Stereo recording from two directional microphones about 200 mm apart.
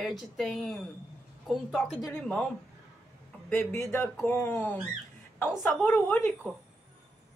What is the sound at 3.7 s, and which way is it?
Speech, 15° left (ahead or behind).